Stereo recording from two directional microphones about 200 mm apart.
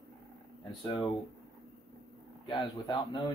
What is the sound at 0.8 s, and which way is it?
Speech, 20° left (ahead or behind).